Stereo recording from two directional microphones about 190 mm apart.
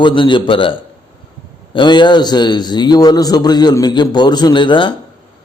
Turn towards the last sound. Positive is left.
turn(degrees=25)  # may be behind; listen again after turning